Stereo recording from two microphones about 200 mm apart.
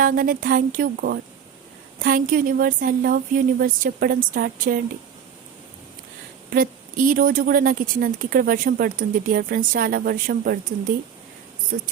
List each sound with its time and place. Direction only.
0.0 s speech: 45° right (ahead or behind)
6.5 s speech: 45° right (ahead or behind)
11.7 s speech: 45° right (ahead or behind)